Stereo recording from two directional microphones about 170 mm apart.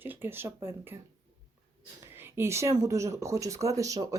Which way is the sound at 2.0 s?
15° right (ahead or behind).